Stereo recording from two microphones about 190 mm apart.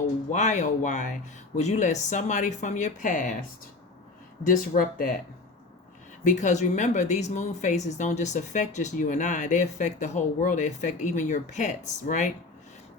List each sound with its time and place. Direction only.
0.3 s speech: 40° left (ahead or behind)
4.4 s speech: 45° left (ahead or behind)
6.2 s speech: 40° left (ahead or behind)